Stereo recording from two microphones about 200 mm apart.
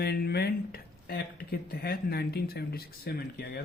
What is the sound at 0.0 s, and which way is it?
A man's voice, 50° left (ahead or behind).